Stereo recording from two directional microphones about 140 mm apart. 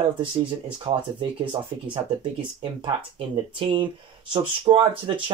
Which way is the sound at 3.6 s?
35° right (ahead or behind).